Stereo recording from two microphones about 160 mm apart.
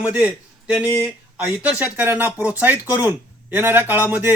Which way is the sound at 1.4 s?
10° right (ahead or behind).